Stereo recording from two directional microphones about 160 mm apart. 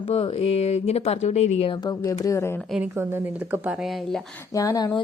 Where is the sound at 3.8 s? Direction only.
Centre (ahead or behind).